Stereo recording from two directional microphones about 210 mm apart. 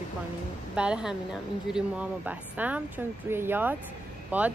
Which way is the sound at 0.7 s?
5° right (ahead or behind).